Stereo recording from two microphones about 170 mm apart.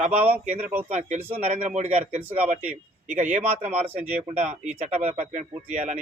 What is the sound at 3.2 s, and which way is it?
Speech, 45° right (ahead or behind).